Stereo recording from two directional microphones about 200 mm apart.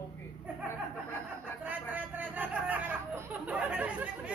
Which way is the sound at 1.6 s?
10° right (ahead or behind).